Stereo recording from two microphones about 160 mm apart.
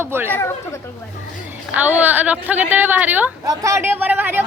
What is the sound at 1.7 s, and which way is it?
A woman's voice, 10° right (ahead or behind).